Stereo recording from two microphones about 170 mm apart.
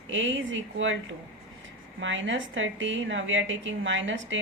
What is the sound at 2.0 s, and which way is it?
A woman's voice, 90° right.